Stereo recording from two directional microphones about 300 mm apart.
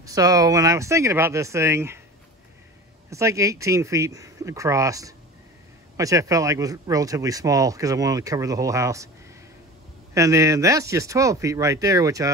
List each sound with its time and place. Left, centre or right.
0.0 s speech: centre
3.1 s speech: centre
10.1 s speech: centre